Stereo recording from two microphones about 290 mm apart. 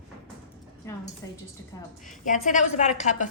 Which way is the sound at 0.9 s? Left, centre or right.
Centre.